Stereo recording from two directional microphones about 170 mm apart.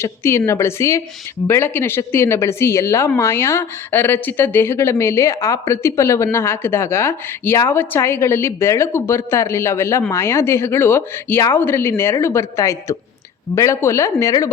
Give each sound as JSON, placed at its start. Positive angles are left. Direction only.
{"t": 0.0, "sound": "speech", "side_deg": 15}